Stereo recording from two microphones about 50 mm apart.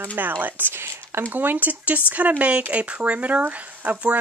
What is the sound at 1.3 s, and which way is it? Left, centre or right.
Speech, right.